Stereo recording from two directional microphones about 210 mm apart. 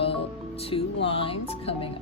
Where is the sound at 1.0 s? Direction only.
25° left (ahead or behind).